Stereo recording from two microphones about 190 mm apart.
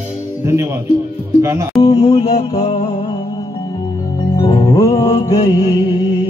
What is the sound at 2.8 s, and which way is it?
Music, 30° left (ahead or behind).